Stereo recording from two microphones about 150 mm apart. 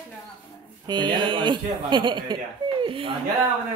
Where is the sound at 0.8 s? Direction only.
30° right (ahead or behind).